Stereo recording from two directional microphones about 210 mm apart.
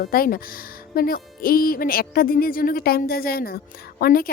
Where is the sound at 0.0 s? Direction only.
45° left (ahead or behind).